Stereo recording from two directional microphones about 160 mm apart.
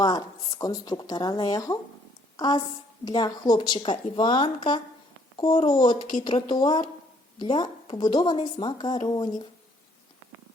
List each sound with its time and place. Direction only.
0.0 s a woman's voice: 25° left (ahead or behind)